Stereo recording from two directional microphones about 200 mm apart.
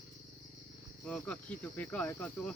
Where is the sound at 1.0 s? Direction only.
5° left (ahead or behind).